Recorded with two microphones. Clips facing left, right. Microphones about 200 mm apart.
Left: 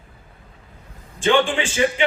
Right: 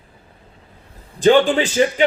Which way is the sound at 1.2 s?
40° right (ahead or behind).